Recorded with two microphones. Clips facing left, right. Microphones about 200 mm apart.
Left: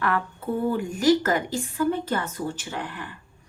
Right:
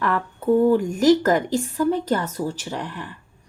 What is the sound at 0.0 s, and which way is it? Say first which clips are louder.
A woman's voice: right 3 dB; 40° right (ahead or behind).